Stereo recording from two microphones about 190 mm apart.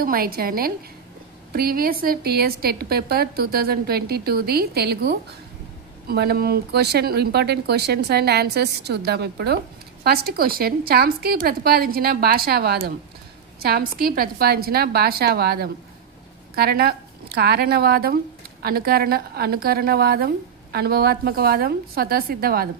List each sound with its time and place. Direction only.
0.0 s a woman's voice: 50° right (ahead or behind)